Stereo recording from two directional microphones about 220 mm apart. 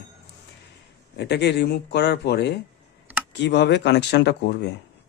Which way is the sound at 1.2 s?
50° left (ahead or behind).